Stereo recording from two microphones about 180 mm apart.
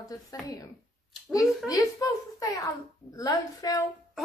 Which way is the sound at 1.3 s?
20° left (ahead or behind).